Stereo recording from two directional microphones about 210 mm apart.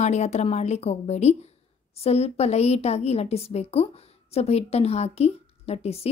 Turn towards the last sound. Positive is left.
turn(degrees=30)  # may be behind; listen again after turning